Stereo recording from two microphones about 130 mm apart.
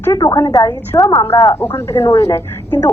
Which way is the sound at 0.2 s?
25° left (ahead or behind).